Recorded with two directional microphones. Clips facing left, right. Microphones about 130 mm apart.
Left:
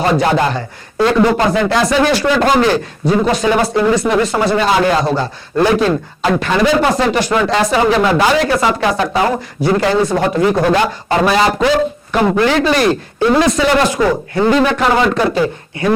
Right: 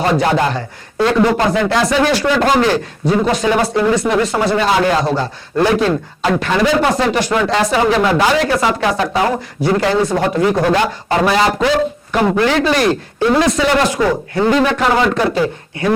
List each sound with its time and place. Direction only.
0.0 s a man's voice: 20° left (ahead or behind)
3.1 s speech: 25° left (ahead or behind)
4.6 s a man's voice: 15° left (ahead or behind)
7.5 s a man's voice: 15° left (ahead or behind)
12.2 s speech: 30° left (ahead or behind)
12.5 s a man's voice: 10° left (ahead or behind)
14.0 s speech: 30° left (ahead or behind)
14.5 s a man's voice: 15° left (ahead or behind)